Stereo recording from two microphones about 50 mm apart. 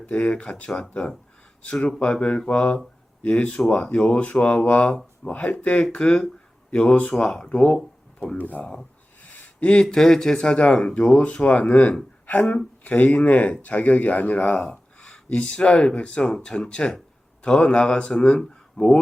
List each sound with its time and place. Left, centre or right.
0.1 s speech: left
8.4 s speech: left
9.3 s a sound: left
9.8 s speech: centre; by 14.8 s left
15.0 s speech: centre